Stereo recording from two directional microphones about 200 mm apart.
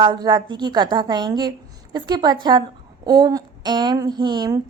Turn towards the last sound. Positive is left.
turn(degrees=-20)  # may be behind; listen again after turning